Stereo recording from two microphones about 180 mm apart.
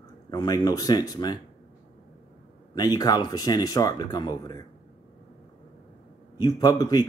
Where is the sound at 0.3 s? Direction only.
20° left (ahead or behind).